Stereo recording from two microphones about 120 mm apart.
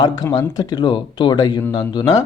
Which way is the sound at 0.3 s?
30° left (ahead or behind).